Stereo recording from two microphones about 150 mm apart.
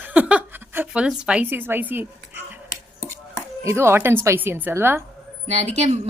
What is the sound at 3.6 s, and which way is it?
A woman's voice, 15° right (ahead or behind).